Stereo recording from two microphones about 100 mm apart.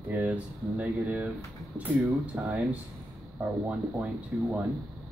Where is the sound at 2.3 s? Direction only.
15° right (ahead or behind).